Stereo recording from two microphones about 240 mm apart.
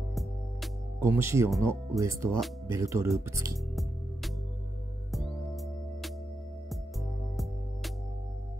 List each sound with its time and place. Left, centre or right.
1.0 s speech: centre
5.1 s music: centre